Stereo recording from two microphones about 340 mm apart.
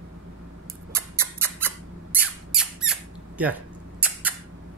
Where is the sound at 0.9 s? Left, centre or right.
Centre.